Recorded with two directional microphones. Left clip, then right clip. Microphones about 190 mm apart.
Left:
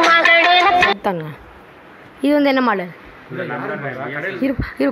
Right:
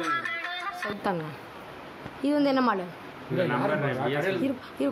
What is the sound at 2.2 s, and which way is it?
Speech, 25° left (ahead or behind).